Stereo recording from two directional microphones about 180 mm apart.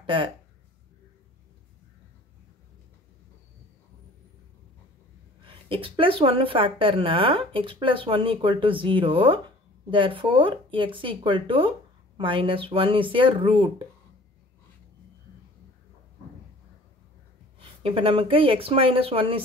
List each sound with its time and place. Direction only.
0.0 s speech: 30° right (ahead or behind)
5.4 s speech: 30° right (ahead or behind)
17.6 s speech: 30° right (ahead or behind)